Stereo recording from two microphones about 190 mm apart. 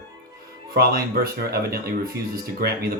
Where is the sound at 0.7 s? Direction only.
55° right (ahead or behind).